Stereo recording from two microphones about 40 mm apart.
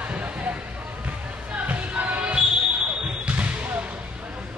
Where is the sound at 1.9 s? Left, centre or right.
Right.